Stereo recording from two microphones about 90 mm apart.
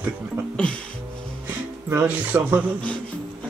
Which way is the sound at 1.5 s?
20° right (ahead or behind).